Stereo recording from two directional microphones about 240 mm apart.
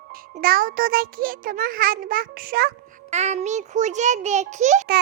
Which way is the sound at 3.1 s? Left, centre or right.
Right.